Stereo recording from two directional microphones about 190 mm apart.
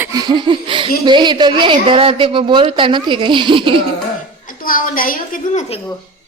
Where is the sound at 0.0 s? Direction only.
20° right (ahead or behind).